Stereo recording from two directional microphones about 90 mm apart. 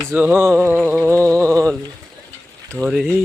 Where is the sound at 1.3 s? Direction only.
35° right (ahead or behind).